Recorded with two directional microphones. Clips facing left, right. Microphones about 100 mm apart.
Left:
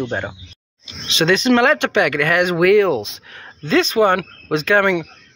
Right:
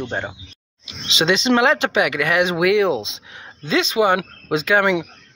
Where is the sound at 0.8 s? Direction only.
20° right (ahead or behind).